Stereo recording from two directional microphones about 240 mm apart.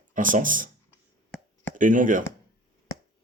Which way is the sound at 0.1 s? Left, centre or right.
Right.